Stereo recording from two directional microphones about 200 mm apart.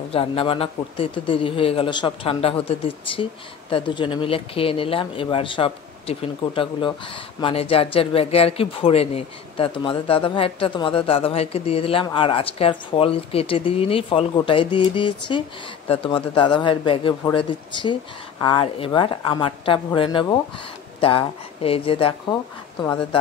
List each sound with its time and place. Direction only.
0.1 s speech: 25° left (ahead or behind)